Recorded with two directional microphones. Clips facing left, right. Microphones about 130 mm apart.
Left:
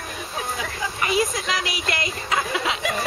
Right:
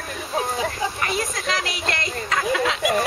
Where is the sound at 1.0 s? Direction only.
5° left (ahead or behind).